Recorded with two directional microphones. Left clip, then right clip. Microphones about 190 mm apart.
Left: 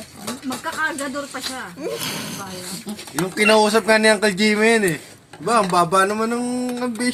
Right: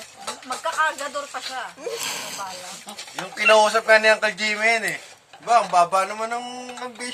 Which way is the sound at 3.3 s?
30° left (ahead or behind).